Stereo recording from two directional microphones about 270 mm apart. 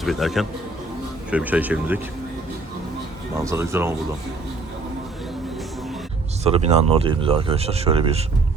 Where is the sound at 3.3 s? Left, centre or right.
Centre.